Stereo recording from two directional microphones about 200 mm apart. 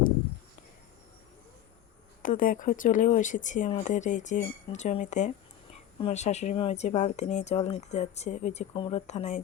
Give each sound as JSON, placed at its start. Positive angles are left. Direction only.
{"t": 2.2, "sound": "speech", "side_deg": 40}